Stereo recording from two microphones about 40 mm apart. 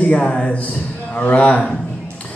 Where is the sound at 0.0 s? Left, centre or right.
Left.